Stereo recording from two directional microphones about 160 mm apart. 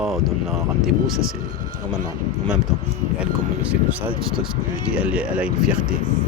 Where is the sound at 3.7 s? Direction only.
10° right (ahead or behind).